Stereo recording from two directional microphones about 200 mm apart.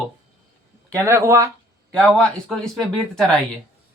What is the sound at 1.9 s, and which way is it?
Speech, 5° left (ahead or behind).